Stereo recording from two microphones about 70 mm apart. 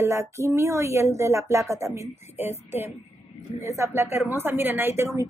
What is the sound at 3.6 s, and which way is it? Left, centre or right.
Speech, right.